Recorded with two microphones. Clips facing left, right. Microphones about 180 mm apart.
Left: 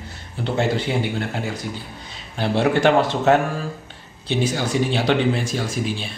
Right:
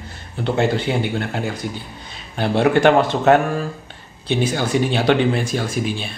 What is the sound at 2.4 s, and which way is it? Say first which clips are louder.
A man's voice: right 3 dB; 55° right (ahead or behind).